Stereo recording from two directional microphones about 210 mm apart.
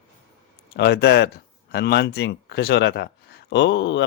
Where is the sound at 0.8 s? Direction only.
50° left (ahead or behind).